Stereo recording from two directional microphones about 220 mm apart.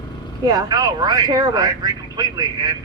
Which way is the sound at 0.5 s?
15° right (ahead or behind).